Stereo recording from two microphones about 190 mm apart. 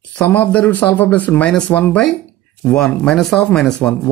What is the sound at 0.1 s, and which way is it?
Speech, 10° left (ahead or behind).